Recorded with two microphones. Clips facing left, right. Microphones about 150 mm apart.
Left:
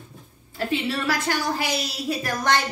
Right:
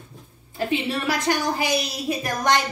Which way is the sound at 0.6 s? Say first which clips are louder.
Right 1 dB; 20° right (ahead or behind).